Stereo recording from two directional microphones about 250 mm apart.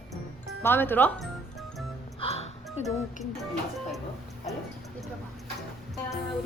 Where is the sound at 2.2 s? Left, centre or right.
Left.